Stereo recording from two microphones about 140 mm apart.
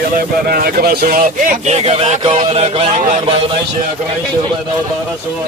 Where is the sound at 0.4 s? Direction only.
90° right.